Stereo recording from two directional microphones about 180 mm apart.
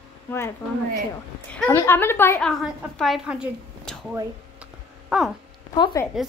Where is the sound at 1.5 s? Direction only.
15° left (ahead or behind).